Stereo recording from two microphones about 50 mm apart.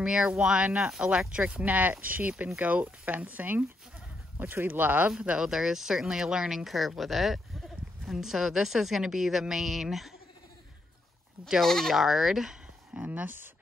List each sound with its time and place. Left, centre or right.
0.0 s speech: centre
1.6 s speech: right
4.6 s speech: right
5.4 s speech: centre
11.6 s speech: centre
11.9 s speech: centre
12.9 s speech: right